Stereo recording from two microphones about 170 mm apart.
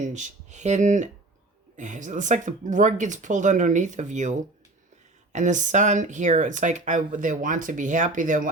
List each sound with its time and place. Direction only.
0.0 s speech: 45° right (ahead or behind)